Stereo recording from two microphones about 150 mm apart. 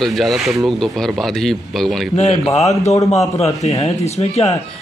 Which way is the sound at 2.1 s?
50° left (ahead or behind).